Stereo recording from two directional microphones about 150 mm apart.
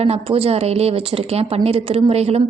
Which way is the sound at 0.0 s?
40° right (ahead or behind).